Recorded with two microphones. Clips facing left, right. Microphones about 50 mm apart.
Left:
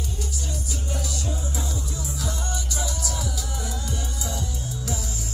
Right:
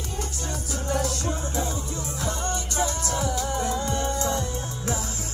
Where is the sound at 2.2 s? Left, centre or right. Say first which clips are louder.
Right 5 dB; right.